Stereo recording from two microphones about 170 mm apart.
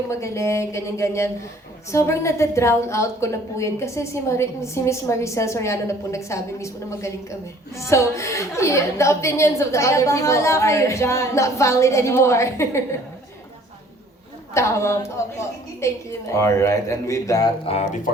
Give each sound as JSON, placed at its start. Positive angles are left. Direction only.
{"t": 0.1, "sound": "a woman's voice", "side_deg": 15}
{"t": 14.5, "sound": "a woman's voice", "side_deg": 15}
{"t": 17.7, "sound": "speech", "side_deg": 45}